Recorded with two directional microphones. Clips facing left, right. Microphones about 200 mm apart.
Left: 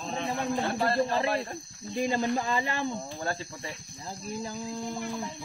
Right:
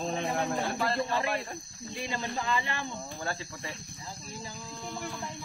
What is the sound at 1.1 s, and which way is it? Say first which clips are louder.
Speech: left 3 dB; 30° left (ahead or behind).